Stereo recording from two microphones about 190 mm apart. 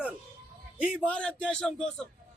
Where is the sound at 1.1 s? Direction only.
5° left (ahead or behind).